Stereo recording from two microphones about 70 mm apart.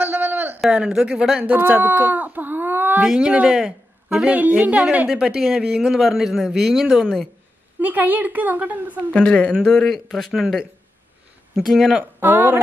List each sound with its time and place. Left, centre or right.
0.0 s a sound: right
0.7 s a woman's voice: centre
1.4 s speech: right
3.0 s a woman's voice: centre
5.1 s a man's voice: centre
7.8 s speech: right
9.1 s a man's voice: centre
12.0 s speech: right